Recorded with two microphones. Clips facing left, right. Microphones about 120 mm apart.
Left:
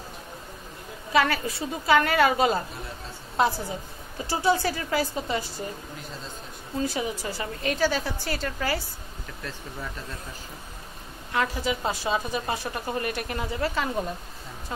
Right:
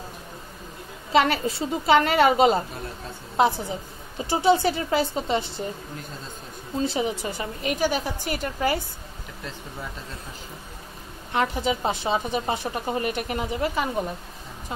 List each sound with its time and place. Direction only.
1.1 s a woman's voice: 25° right (ahead or behind)
6.8 s a woman's voice: 25° right (ahead or behind)
11.3 s a woman's voice: 25° right (ahead or behind)